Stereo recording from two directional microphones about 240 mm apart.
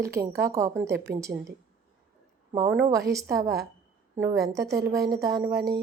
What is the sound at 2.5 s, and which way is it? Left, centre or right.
Speech, centre.